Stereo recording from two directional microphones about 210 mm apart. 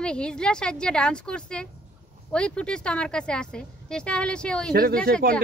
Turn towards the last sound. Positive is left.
turn(degrees=-45)  # may be behind; listen again after turning